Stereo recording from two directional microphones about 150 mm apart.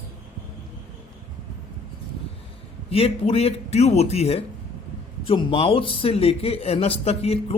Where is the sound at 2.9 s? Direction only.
40° left (ahead or behind).